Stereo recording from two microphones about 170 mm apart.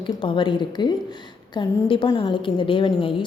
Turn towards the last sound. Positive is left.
turn(degrees=30)  # may be behind; listen again after turning